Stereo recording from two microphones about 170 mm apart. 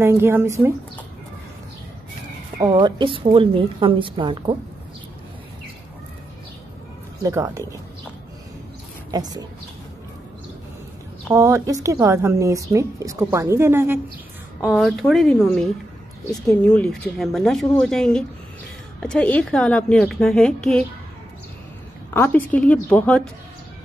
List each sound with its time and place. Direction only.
0.0 s a woman's voice: 15° right (ahead or behind)
2.6 s a woman's voice: 25° right (ahead or behind)
7.2 s a woman's voice: 20° right (ahead or behind)
9.1 s a woman's voice: 20° right (ahead or behind)
11.3 s a woman's voice: 20° right (ahead or behind)
14.6 s speech: 5° right (ahead or behind)
22.1 s a woman's voice: 10° left (ahead or behind)